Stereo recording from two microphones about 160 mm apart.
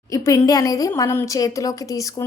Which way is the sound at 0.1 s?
20° left (ahead or behind).